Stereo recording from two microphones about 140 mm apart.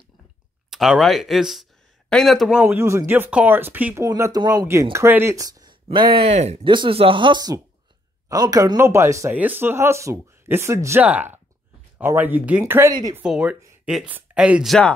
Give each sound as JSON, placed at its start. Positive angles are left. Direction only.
{"t": 0.7, "sound": "speech", "side_deg": 0}
{"t": 2.6, "sound": "speech", "side_deg": -15}
{"t": 6.1, "sound": "speech", "side_deg": -50}